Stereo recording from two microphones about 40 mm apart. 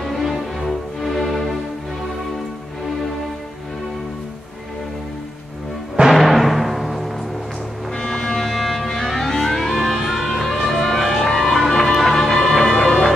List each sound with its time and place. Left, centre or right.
0.0 s music: centre
6.0 s timpani: centre
7.9 s music: centre
8.4 s music: centre